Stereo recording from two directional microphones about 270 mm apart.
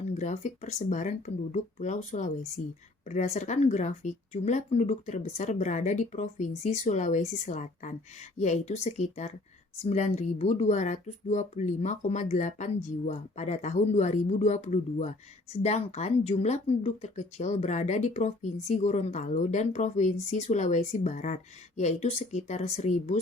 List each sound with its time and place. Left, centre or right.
0.1 s speech: left